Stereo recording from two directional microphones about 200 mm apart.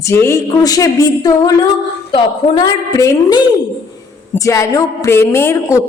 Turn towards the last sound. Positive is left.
turn(degrees=15)  # may be behind; listen again after turning